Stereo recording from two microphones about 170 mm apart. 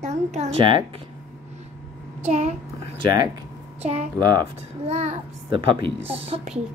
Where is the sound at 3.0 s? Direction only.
25° right (ahead or behind).